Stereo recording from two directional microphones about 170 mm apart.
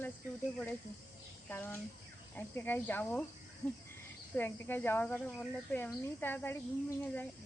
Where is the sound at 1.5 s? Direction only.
10° left (ahead or behind).